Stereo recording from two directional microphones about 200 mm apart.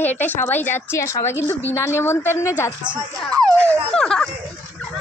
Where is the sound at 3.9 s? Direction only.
5° left (ahead or behind).